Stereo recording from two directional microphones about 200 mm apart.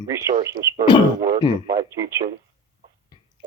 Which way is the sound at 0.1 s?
15° right (ahead or behind).